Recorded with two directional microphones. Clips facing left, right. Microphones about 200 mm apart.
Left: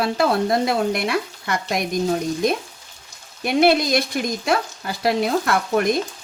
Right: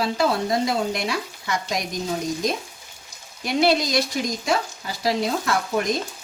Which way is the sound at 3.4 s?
55° left (ahead or behind).